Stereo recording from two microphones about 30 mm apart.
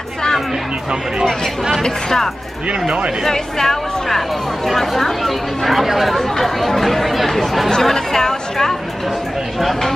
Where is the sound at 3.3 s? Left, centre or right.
Centre.